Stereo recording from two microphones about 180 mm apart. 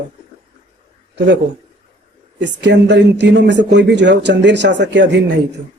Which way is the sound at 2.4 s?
75° right (ahead or behind).